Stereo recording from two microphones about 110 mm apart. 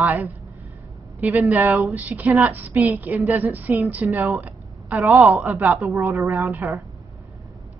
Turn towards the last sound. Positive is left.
turn(degrees=-20)  # may be behind; listen again after turning